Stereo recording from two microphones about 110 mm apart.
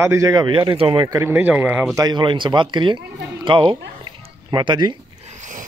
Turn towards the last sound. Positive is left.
turn(degrees=-45)  # may be behind; listen again after turning